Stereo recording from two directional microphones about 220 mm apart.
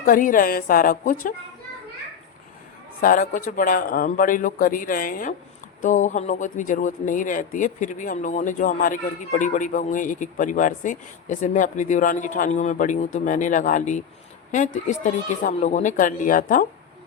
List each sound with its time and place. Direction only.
0.0 s speech: 40° left (ahead or behind)
3.0 s speech: 40° left (ahead or behind)